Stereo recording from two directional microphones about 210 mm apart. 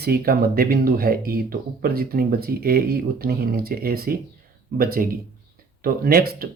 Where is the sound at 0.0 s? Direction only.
45° right (ahead or behind).